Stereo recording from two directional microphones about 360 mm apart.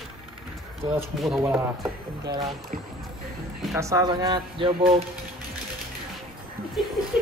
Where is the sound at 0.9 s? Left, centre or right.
Centre.